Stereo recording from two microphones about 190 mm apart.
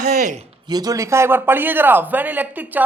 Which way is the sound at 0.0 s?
45° right (ahead or behind).